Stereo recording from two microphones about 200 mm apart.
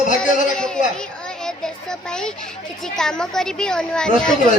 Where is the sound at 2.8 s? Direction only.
5° left (ahead or behind).